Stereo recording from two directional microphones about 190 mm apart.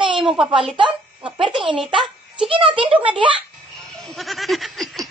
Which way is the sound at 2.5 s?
30° right (ahead or behind).